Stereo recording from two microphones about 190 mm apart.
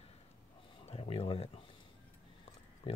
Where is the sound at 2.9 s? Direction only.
30° left (ahead or behind).